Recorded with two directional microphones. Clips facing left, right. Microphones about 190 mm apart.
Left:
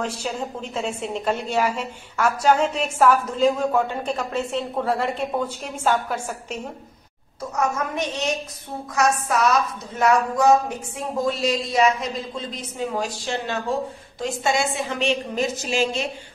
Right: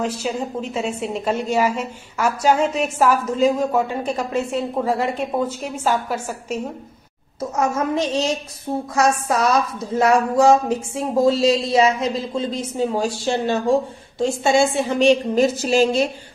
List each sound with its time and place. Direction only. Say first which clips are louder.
0.2 s a woman's voice: right 4 dB; 5° right (ahead or behind)
7.5 s speech: right 4 dB; 25° right (ahead or behind)